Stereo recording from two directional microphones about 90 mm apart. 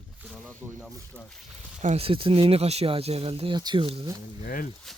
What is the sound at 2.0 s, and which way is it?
Speech, 85° right.